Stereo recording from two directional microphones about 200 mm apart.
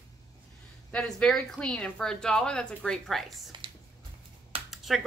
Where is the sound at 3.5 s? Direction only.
25° right (ahead or behind).